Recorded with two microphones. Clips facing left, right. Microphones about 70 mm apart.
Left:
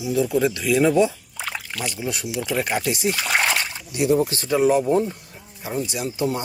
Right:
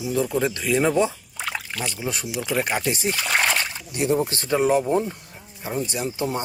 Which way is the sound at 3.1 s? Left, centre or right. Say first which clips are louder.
Even; centre.